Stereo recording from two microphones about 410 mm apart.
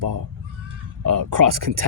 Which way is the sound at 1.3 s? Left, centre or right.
Right.